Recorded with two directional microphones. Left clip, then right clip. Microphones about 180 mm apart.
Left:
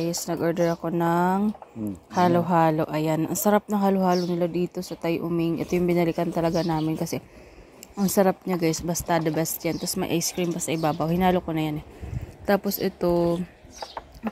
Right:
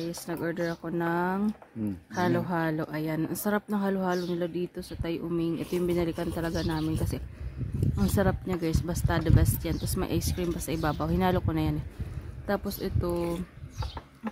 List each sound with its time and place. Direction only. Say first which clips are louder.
0.0 s speech: left 7 dB; 15° left (ahead or behind)
8.0 s speech: left 7 dB; 10° left (ahead or behind)
12.4 s speech: left 8 dB; 15° left (ahead or behind)